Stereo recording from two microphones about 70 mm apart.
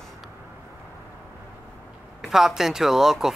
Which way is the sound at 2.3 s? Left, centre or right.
Centre.